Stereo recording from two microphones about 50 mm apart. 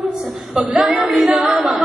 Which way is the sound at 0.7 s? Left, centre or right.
Right.